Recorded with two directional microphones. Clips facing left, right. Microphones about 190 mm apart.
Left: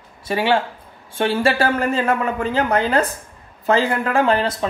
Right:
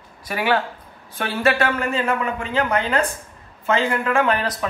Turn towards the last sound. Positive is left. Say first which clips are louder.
# left 2 dB
turn(degrees=30)  # may be behind; listen again after turning